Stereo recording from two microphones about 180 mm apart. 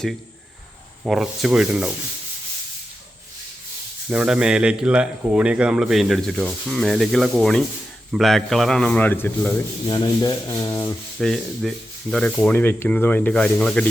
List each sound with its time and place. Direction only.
1.0 s speech: 5° right (ahead or behind)
4.1 s speech: 5° right (ahead or behind); by 9.5 s 10° left (ahead or behind)
9.9 s rub: 20° left (ahead or behind)
11.2 s speech: centre (ahead or behind)